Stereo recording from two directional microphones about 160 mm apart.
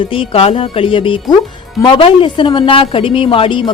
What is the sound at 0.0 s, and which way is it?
Speech, 35° left (ahead or behind).